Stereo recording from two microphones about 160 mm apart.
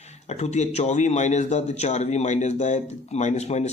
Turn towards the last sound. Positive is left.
turn(degrees=45)  # may be behind; listen again after turning